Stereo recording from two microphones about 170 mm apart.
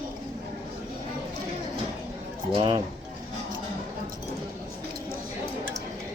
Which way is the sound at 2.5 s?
30° right (ahead or behind).